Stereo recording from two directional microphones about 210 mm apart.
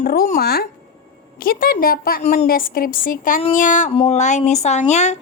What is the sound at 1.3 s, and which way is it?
A woman's voice, 45° left (ahead or behind).